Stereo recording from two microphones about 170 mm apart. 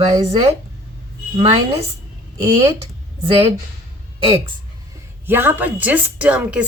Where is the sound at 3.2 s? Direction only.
35° right (ahead or behind).